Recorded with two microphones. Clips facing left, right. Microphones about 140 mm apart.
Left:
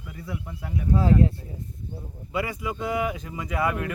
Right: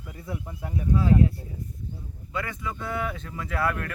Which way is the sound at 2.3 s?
15° left (ahead or behind).